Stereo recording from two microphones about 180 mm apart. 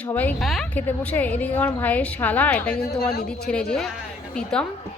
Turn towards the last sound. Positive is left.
turn(degrees=5)  # may be behind; listen again after turning